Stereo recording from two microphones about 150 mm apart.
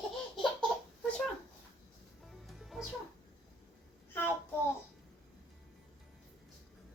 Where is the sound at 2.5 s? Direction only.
Centre (ahead or behind).